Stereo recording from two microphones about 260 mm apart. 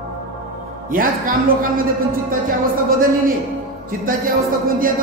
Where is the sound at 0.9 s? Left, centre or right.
Right.